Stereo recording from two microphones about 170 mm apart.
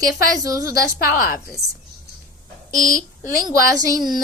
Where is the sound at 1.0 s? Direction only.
60° left (ahead or behind).